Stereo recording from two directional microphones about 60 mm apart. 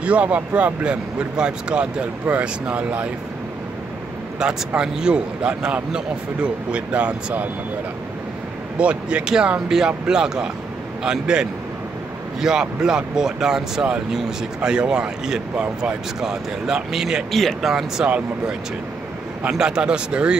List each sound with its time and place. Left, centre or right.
0.0 s speech: right
4.4 s speech: centre
8.7 s speech: centre
16.2 s speech: centre
19.5 s speech: centre